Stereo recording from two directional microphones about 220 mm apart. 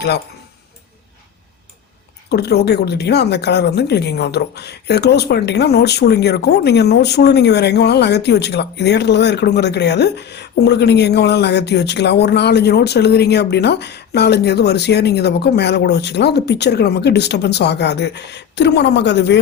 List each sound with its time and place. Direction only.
2.3 s a woman's voice: 45° left (ahead or behind)